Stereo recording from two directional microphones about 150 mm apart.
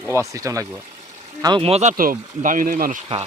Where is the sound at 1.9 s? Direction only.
70° right (ahead or behind).